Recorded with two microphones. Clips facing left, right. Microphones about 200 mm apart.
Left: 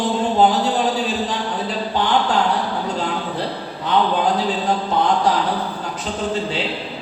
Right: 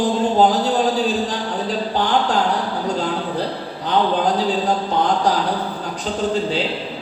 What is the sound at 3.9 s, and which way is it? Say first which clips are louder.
Speech: even; 40° right (ahead or behind).